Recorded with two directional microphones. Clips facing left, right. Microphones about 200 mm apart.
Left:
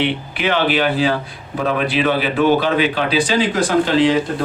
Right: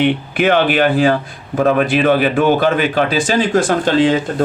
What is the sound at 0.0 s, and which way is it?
Speech, 50° right (ahead or behind).